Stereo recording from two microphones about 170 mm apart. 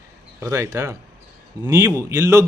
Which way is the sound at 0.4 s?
15° right (ahead or behind).